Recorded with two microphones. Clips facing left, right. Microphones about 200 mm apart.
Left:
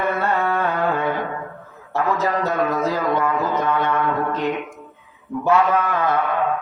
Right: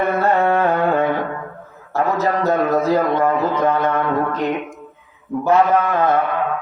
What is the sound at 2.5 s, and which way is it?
Speech, 40° right (ahead or behind).